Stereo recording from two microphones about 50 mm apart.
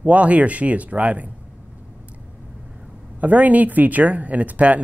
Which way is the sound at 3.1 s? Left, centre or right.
Right.